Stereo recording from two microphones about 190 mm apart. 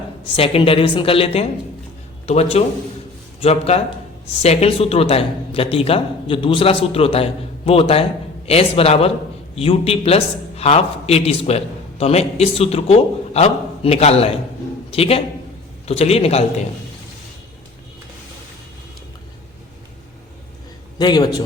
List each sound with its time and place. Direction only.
0.3 s a man's voice: 30° left (ahead or behind)
21.0 s a man's voice: 20° left (ahead or behind)